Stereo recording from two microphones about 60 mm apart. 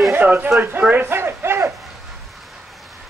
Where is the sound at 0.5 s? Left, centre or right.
Centre.